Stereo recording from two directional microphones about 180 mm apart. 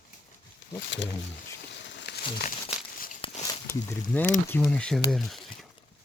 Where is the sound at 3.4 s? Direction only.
20° left (ahead or behind).